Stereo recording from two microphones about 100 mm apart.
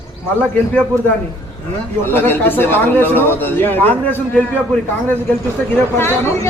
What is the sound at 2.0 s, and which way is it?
A man's voice, 20° left (ahead or behind).